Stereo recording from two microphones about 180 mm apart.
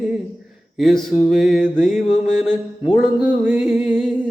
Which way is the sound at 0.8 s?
Centre (ahead or behind).